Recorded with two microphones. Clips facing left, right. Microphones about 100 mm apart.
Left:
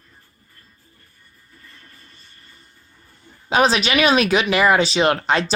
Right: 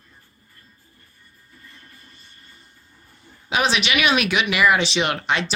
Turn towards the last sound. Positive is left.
turn(degrees=35)  # may be behind; listen again after turning